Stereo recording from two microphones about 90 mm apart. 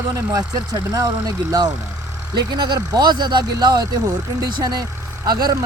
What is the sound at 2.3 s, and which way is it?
Speech, 55° right (ahead or behind).